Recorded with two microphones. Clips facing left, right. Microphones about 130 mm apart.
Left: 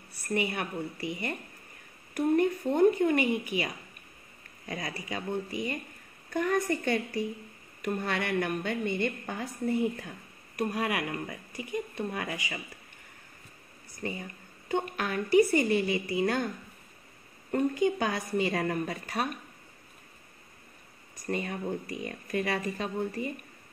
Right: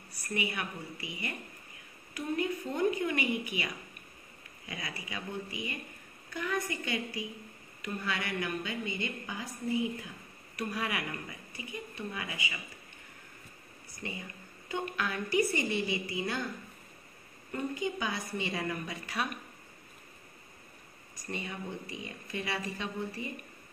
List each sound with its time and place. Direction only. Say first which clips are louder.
0.3 s speech: left 5 dB; 40° left (ahead or behind)
2.1 s a woman's voice: left 8 dB; 55° left (ahead or behind)
14.0 s a woman's voice: left 5 dB; 40° left (ahead or behind)
17.5 s a woman's voice: left 8 dB; 50° left (ahead or behind)
18.6 s speech: left 6 dB; 40° left (ahead or behind)
21.3 s speech: left 7 dB; 50° left (ahead or behind)